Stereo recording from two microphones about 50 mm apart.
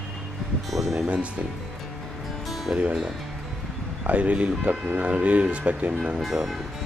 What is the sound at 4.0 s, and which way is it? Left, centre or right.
A man's voice, right.